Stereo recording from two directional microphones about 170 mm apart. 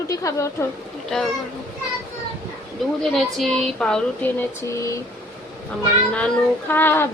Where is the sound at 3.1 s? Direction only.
Centre (ahead or behind).